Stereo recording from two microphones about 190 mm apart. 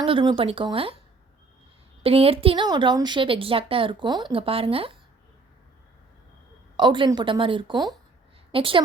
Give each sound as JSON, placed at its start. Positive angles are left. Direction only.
{"t": 0.0, "sound": "a woman's voice", "side_deg": -25}
{"t": 2.0, "sound": "a woman's voice", "side_deg": -30}
{"t": 6.7, "sound": "a woman's voice", "side_deg": -25}